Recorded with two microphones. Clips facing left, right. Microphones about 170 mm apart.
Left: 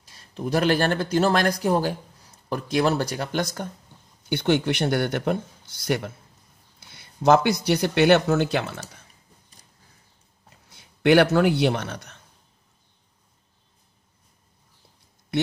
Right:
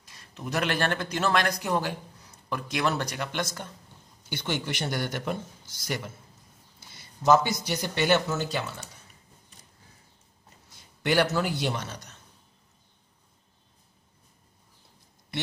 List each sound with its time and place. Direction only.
0.0 s speech: 30° left (ahead or behind)
4.3 s a man's voice: 60° left (ahead or behind)
10.7 s a man's voice: 65° left (ahead or behind)